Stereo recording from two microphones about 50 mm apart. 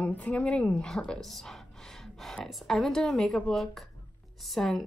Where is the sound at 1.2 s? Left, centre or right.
Centre.